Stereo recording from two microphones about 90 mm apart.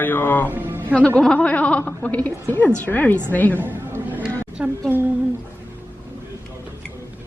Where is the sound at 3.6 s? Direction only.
20° right (ahead or behind).